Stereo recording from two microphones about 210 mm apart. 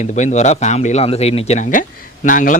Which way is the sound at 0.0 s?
35° left (ahead or behind).